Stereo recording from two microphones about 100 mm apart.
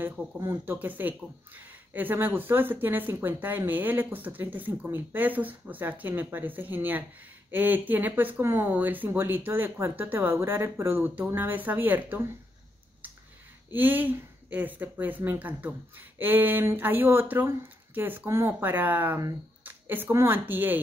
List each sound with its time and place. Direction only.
0.4 s speech: 30° right (ahead or behind)
0.7 s speech: 20° right (ahead or behind)
13.7 s a woman's voice: 15° right (ahead or behind)